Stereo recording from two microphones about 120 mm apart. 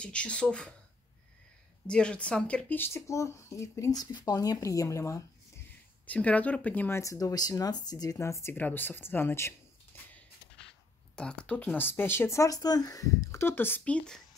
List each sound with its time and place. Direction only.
0.0 s speech: 10° left (ahead or behind)
1.9 s speech: 10° left (ahead or behind); by 5.2 s 25° left (ahead or behind)
6.0 s speech: 10° left (ahead or behind)
7.0 s speech: 25° left (ahead or behind)
11.1 s speech: 10° left (ahead or behind)